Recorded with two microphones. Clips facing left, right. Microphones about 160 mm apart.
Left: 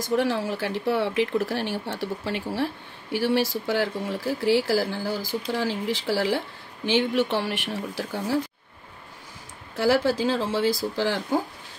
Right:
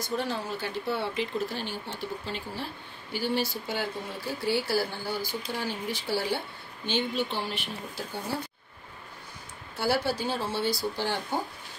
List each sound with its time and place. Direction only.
0.0 s speech: 90° left
9.8 s speech: 90° left